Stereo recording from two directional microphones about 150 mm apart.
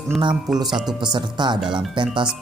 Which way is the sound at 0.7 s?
5° right (ahead or behind).